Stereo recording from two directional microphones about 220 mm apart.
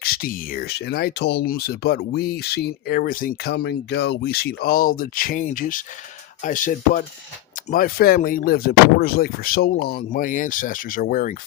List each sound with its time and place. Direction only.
0.0 s speech: 45° left (ahead or behind)